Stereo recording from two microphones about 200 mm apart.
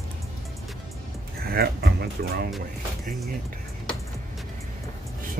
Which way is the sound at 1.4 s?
50° right (ahead or behind).